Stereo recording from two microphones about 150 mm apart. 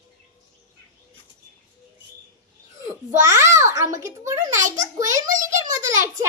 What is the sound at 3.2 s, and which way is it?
A child's voice, 20° right (ahead or behind).